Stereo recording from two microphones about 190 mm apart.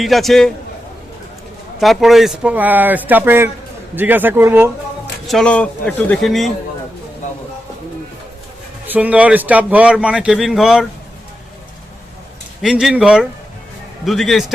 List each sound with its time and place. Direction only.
0.0 s speech: centre (ahead or behind)
1.8 s speech: centre (ahead or behind)
5.2 s speech: centre (ahead or behind)
8.9 s speech: 10° right (ahead or behind)
12.6 s speech: 5° right (ahead or behind)